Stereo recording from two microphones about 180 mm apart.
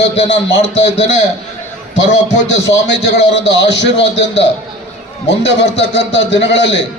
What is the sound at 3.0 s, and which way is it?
A man's voice, 70° left (ahead or behind).